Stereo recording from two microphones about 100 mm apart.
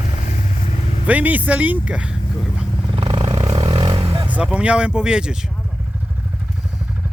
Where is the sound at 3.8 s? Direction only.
55° right (ahead or behind).